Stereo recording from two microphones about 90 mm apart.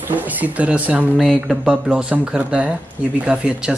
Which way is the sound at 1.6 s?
10° right (ahead or behind).